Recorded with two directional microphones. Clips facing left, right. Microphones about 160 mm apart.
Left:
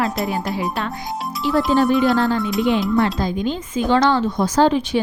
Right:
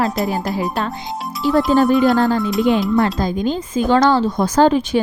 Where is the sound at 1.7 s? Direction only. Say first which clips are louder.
Right 2 dB; 40° right (ahead or behind).